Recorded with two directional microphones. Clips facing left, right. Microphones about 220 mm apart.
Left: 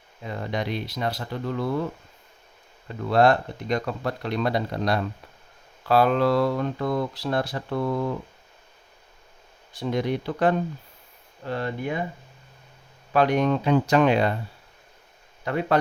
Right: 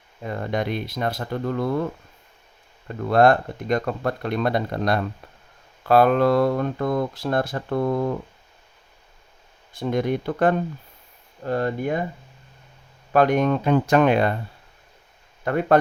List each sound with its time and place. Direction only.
0.2 s speech: 50° right (ahead or behind)
9.7 s speech: 50° right (ahead or behind)
13.1 s speech: 50° right (ahead or behind)
15.4 s speech: 50° right (ahead or behind)